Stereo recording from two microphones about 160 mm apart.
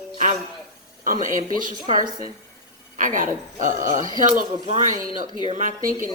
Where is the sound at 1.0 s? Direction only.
55° right (ahead or behind).